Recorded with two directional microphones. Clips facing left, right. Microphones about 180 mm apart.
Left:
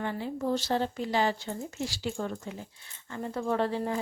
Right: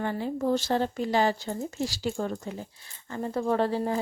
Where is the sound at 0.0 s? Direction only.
45° right (ahead or behind).